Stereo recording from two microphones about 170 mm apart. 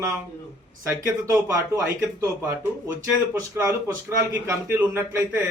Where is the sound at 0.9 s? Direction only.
15° right (ahead or behind).